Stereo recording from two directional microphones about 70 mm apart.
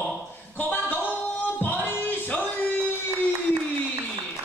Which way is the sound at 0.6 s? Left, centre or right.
Left.